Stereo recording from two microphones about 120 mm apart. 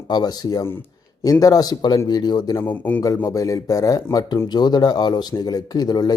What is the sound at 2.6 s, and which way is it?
Speech, 15° left (ahead or behind).